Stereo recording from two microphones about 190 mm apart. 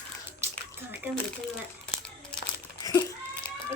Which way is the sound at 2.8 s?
20° left (ahead or behind).